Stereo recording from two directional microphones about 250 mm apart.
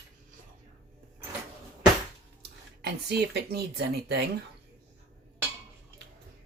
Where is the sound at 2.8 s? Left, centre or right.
Right.